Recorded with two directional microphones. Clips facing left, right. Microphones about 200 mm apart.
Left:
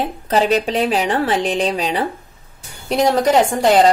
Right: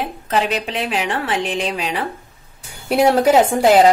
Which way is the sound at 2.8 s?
10° right (ahead or behind).